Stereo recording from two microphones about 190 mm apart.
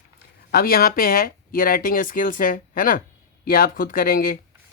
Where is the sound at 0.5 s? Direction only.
50° left (ahead or behind).